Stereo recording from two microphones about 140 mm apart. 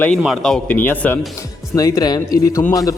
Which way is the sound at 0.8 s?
15° left (ahead or behind).